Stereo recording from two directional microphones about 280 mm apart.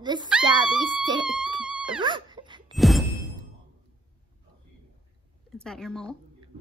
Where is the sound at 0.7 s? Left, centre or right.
Centre.